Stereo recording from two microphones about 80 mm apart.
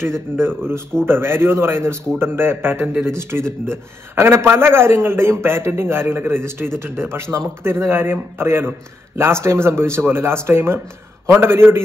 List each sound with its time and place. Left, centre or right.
0.0 s a man's voice: right